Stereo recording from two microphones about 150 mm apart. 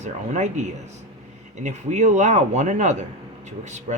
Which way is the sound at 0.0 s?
50° right (ahead or behind).